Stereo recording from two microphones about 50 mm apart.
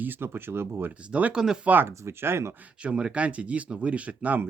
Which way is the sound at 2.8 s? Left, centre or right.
Right.